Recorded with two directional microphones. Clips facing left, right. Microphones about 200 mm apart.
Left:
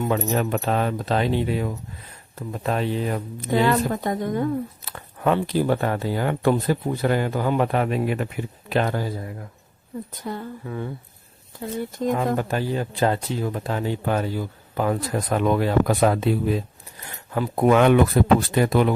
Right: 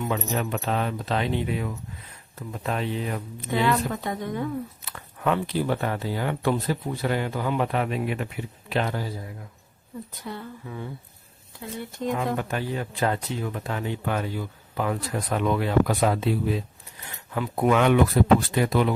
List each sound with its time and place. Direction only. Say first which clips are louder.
0.6 s speech: left 4 dB; 45° left (ahead or behind)
11.9 s speech: left 3 dB; 40° left (ahead or behind)